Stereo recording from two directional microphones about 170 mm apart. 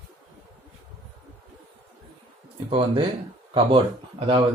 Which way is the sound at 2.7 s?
30° right (ahead or behind).